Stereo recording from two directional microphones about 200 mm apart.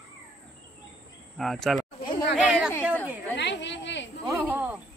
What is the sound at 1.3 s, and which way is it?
Speech, centre (ahead or behind).